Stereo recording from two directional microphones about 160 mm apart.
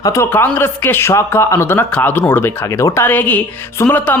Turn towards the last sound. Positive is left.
turn(degrees=10)  # may be behind; listen again after turning